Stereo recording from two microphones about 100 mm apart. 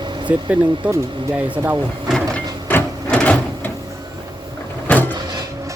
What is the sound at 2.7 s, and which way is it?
Printer, 15° left (ahead or behind).